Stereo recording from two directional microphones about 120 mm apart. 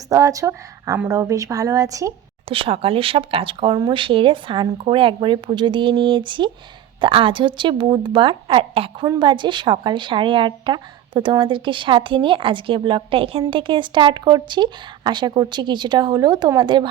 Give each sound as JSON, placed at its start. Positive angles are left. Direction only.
{"t": 0.1, "sound": "a woman's voice", "side_deg": -30}
{"t": 2.5, "sound": "a woman's voice", "side_deg": -50}
{"t": 9.0, "sound": "a woman's voice", "side_deg": -40}